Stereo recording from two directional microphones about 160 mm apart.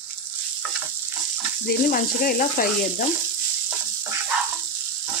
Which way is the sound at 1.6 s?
65° left (ahead or behind).